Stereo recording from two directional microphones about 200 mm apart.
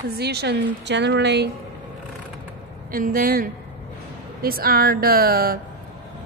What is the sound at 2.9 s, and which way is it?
A woman's voice, 45° right (ahead or behind).